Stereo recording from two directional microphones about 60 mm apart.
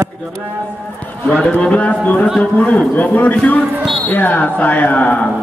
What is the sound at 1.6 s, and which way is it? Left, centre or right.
Speech, left.